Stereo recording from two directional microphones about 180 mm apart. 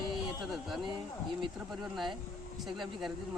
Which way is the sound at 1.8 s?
Centre (ahead or behind).